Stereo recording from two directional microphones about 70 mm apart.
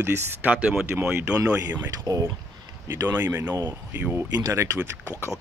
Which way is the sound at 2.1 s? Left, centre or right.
Right.